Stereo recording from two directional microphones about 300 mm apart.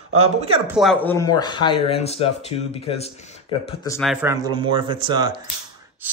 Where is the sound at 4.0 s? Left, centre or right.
Centre.